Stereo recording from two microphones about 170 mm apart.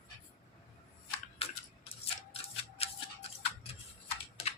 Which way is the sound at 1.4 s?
35° left (ahead or behind).